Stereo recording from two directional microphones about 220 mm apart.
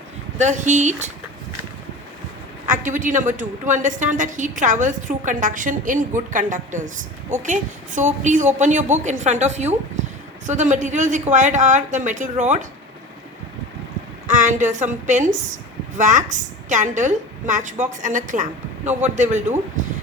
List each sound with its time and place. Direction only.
0.3 s a woman's voice: 30° right (ahead or behind)
2.6 s a woman's voice: 35° right (ahead or behind)
14.3 s a woman's voice: 35° right (ahead or behind)